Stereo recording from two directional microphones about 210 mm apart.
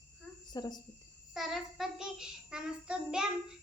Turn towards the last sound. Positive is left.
turn(degrees=-5)  # may be behind; listen again after turning